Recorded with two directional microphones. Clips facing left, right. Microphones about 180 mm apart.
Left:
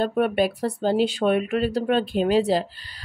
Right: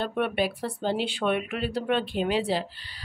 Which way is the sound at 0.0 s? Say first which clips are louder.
Left 5 dB; 40° left (ahead or behind).